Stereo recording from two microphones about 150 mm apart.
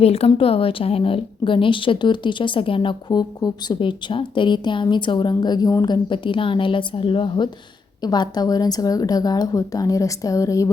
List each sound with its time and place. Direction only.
0.0 s a woman's voice: 40° left (ahead or behind); by 10.7 s 20° left (ahead or behind)